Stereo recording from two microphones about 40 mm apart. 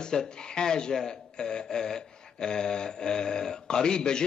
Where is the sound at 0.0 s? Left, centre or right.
Centre.